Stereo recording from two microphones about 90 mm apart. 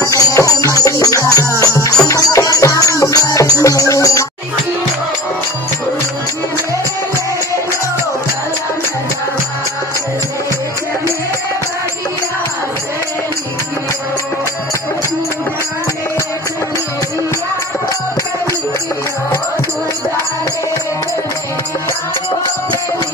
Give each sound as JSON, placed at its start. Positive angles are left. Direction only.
{"t": 0.0, "sound": "music", "side_deg": 40}